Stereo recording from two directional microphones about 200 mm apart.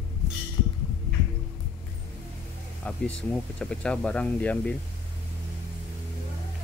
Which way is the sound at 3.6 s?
5° left (ahead or behind).